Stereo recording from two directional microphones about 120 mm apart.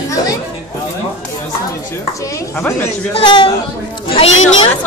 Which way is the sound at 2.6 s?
15° left (ahead or behind).